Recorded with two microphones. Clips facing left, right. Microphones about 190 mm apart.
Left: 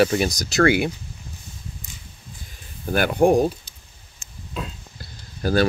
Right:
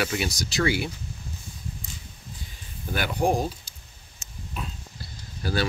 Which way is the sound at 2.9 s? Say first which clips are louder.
Left 7 dB; 55° left (ahead or behind).